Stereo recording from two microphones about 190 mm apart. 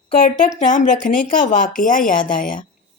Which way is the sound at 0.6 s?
40° left (ahead or behind).